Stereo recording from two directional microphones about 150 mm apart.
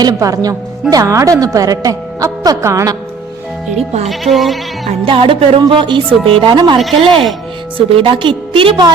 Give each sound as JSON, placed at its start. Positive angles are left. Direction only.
{"t": 0.0, "sound": "a woman's voice", "side_deg": -25}
{"t": 3.8, "sound": "speech", "side_deg": -45}
{"t": 4.1, "sound": "bleat", "side_deg": 0}
{"t": 4.9, "sound": "speech", "side_deg": -35}
{"t": 6.7, "sound": "bleat", "side_deg": 0}
{"t": 7.8, "sound": "speech", "side_deg": -35}